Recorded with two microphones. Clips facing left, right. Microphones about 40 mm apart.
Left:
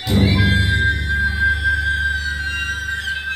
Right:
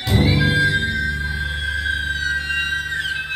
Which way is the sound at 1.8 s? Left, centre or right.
Right.